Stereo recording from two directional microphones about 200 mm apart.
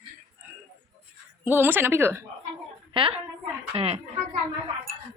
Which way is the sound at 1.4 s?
10° right (ahead or behind).